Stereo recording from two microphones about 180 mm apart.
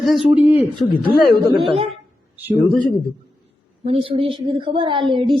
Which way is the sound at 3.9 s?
30° right (ahead or behind).